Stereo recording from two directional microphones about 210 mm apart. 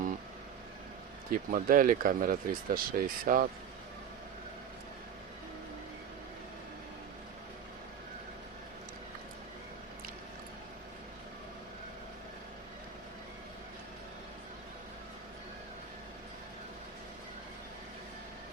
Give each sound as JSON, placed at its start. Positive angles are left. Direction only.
{"t": 1.3, "sound": "speech", "side_deg": -40}